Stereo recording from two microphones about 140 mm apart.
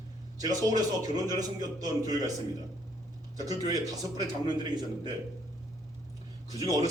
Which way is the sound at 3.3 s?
25° right (ahead or behind).